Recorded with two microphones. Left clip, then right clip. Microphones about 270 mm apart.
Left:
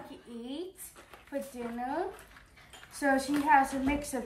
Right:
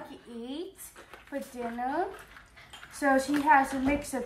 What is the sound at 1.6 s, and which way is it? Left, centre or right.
A child's voice, centre.